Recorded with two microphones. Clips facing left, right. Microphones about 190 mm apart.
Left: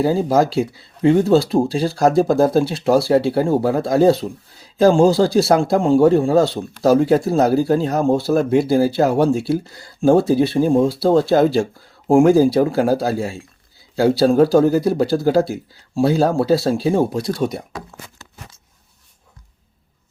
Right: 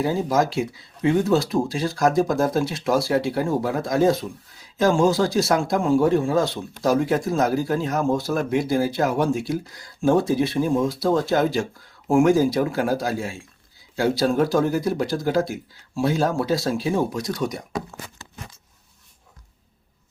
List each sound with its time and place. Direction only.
0.0 s speech: 35° left (ahead or behind)